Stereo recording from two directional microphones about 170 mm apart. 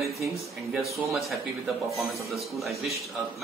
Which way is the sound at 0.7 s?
5° right (ahead or behind).